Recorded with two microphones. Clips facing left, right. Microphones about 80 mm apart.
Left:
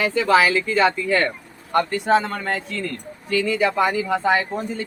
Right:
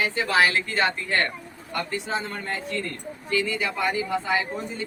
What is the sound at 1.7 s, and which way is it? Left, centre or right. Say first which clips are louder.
Speech: left 9 dB; left.